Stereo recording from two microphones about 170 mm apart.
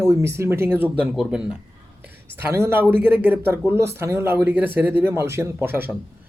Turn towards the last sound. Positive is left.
turn(degrees=-10)  # may be behind; listen again after turning